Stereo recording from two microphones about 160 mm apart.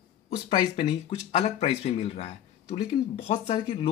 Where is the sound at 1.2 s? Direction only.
45° left (ahead or behind).